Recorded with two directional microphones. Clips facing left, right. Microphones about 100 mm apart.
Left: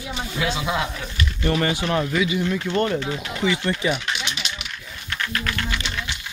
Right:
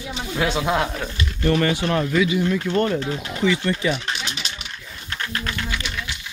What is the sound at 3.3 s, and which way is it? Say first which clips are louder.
Speech: right 2 dB; 10° left (ahead or behind).